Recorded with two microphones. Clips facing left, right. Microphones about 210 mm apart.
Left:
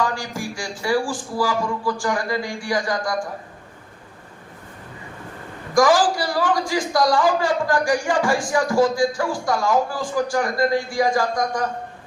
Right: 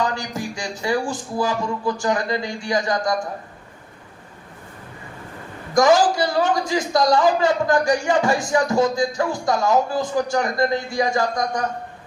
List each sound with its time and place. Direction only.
0.0 s speech: 20° right (ahead or behind)
5.7 s a man's voice: 20° right (ahead or behind)